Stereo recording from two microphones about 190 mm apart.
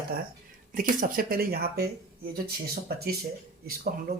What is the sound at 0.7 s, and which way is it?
Speech, 45° right (ahead or behind).